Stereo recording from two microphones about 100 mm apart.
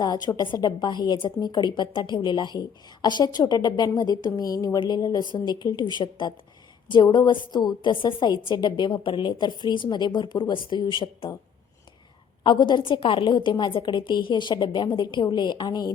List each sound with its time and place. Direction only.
0.0 s a woman's voice: 40° left (ahead or behind)
12.4 s a woman's voice: 50° left (ahead or behind)